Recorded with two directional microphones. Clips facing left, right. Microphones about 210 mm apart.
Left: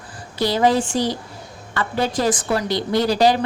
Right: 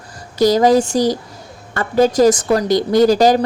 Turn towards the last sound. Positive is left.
turn(degrees=-45)  # may be behind; listen again after turning